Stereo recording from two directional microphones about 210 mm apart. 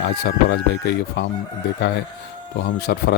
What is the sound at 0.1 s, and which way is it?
Speech, 50° left (ahead or behind).